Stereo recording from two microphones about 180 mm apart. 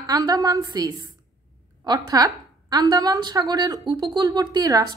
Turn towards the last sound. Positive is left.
turn(degrees=-20)  # may be behind; listen again after turning